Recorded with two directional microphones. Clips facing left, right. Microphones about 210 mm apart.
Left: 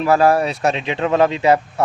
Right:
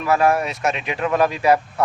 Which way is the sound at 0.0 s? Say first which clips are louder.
Left 4 dB; 30° left (ahead or behind).